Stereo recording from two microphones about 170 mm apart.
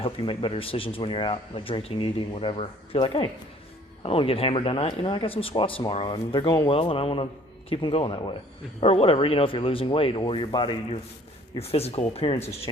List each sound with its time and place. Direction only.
0.0 s speech: 30° left (ahead or behind)